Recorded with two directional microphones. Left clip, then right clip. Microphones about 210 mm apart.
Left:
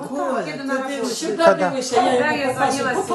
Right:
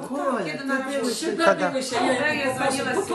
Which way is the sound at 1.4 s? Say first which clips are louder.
Left 5 dB; 25° left (ahead or behind).